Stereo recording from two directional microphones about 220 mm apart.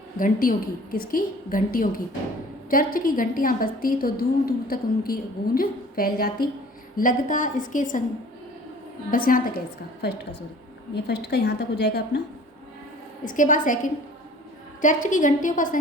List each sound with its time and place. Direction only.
0.2 s a woman's voice: 40° left (ahead or behind)
9.0 s a woman's voice: 40° left (ahead or behind)
10.9 s a woman's voice: 50° left (ahead or behind)
13.2 s a woman's voice: 35° left (ahead or behind)